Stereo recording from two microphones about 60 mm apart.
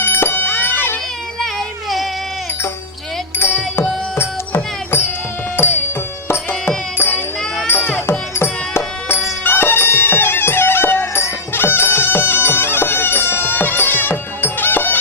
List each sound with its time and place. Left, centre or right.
0.0 s music: left
1.4 s baby cry: centre
3.4 s music: left
8.4 s music: left